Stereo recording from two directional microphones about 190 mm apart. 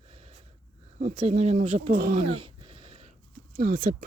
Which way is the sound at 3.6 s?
45° right (ahead or behind).